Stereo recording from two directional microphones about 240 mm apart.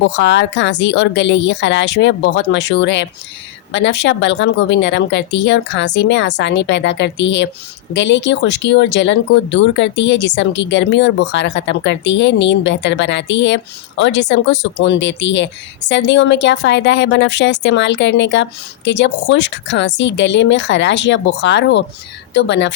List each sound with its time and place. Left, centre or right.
0.0 s speech: left